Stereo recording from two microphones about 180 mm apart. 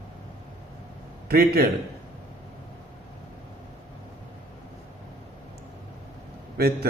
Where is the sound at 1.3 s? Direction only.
60° right (ahead or behind).